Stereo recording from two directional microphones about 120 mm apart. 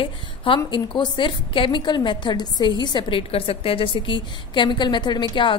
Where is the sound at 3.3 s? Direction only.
50° left (ahead or behind).